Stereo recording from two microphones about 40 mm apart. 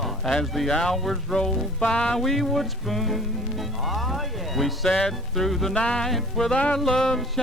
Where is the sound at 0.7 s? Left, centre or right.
Centre.